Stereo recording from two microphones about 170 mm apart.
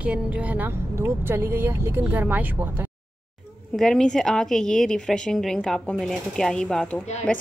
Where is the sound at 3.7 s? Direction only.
5° left (ahead or behind).